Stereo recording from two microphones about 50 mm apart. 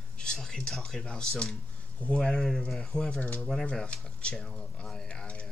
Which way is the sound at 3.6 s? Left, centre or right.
Centre.